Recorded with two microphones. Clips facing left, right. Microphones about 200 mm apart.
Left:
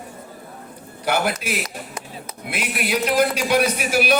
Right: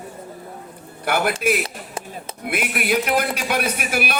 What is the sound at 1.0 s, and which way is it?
A man's voice, 55° right (ahead or behind).